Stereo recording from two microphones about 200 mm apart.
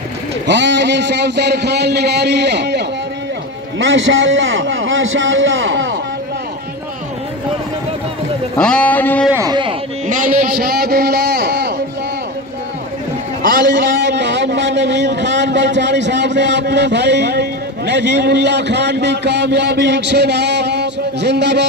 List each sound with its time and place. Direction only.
0.5 s a man's voice: 60° right (ahead or behind)
3.8 s a man's voice: 70° right (ahead or behind)
8.5 s speech: 5° left (ahead or behind)
9.3 s speech: 20° right (ahead or behind)
10.0 s a sound: 40° right (ahead or behind)
13.5 s a man's voice: 60° right (ahead or behind)